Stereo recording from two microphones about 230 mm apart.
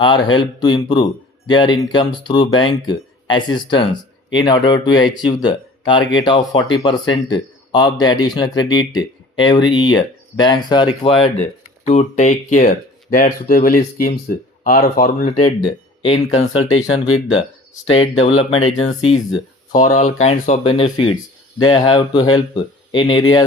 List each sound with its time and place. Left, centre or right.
0.0 s speech: left
11.9 s speech: left
15.4 s speech: centre
17.9 s speech: left